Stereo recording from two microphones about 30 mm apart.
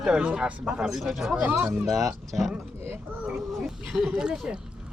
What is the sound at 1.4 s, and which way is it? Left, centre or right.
Speech, right.